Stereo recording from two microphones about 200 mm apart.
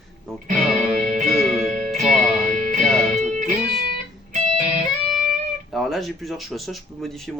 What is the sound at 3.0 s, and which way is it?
Music, 35° right (ahead or behind).